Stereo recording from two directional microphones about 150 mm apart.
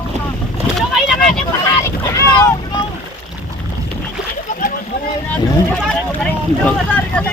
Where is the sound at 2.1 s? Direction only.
30° left (ahead or behind).